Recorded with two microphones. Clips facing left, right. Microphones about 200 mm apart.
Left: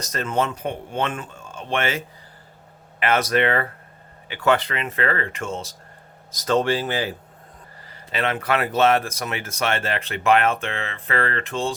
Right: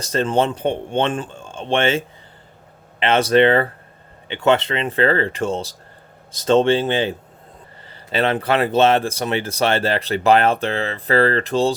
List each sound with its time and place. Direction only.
0.0 s speech: 30° right (ahead or behind)